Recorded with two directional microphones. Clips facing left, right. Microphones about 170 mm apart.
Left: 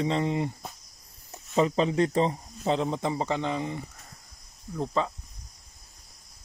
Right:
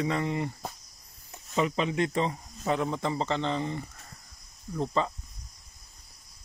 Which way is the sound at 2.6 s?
20° left (ahead or behind).